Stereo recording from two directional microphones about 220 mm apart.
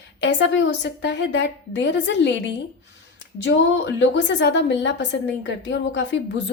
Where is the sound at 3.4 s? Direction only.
55° left (ahead or behind).